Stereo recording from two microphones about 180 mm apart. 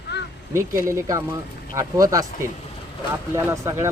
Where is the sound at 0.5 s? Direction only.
15° right (ahead or behind).